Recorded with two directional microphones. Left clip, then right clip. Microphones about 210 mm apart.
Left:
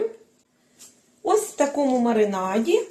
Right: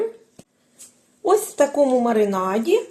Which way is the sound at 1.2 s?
35° right (ahead or behind).